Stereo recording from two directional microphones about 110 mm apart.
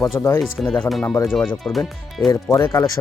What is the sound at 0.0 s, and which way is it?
Speech, 25° left (ahead or behind).